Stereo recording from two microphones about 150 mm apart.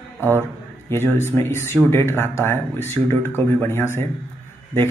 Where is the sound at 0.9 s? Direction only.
15° left (ahead or behind).